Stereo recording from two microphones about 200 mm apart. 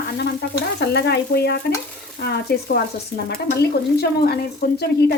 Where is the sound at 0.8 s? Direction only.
55° left (ahead or behind).